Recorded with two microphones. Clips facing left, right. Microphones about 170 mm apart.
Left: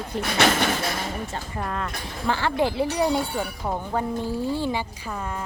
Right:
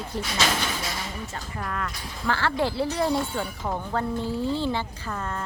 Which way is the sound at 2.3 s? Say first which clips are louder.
Left 2 dB; 15° left (ahead or behind).